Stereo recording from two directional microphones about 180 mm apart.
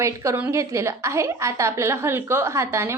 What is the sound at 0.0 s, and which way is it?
A woman's voice, 15° right (ahead or behind).